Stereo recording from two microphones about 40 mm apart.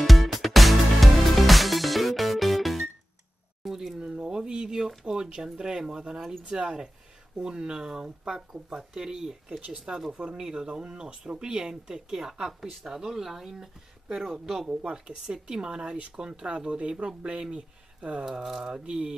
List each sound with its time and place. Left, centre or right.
0.0 s music: centre
3.6 s a sound: centre
4.0 s a sound: right
5.0 s speech: centre
6.1 s speech: centre; by 11.7 s right
11.7 s speech: centre
14.7 s speech: right
18.4 s speech: centre
18.7 s speech: centre